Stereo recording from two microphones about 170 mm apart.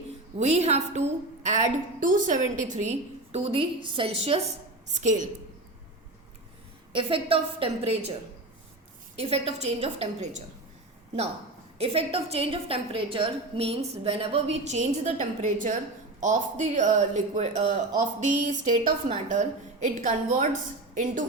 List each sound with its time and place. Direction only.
0.3 s a woman's voice: 40° right (ahead or behind)
4.9 s speech: 45° right (ahead or behind)
6.9 s a woman's voice: 30° right (ahead or behind)
9.1 s a woman's voice: 35° right (ahead or behind)
11.8 s a woman's voice: 35° right (ahead or behind)